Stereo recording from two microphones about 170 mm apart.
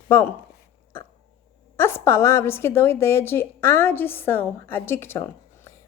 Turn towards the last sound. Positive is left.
turn(degrees=15)  # may be behind; listen again after turning